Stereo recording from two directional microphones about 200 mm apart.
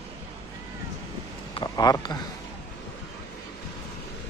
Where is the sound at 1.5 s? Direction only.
20° left (ahead or behind).